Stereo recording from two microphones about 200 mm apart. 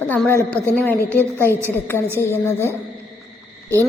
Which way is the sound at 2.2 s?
15° left (ahead or behind).